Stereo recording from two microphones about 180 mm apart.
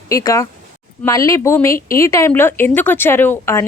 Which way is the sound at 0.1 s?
20° left (ahead or behind).